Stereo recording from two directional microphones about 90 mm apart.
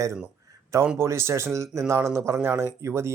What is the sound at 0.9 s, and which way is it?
Speech, 30° right (ahead or behind).